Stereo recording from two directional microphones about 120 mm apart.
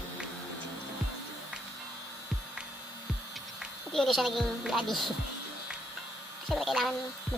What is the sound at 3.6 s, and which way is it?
A woman's voice, centre (ahead or behind).